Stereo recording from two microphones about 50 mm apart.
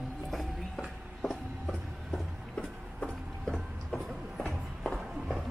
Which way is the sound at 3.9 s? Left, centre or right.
Centre.